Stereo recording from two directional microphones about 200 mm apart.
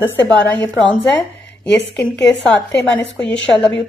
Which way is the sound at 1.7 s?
5° left (ahead or behind).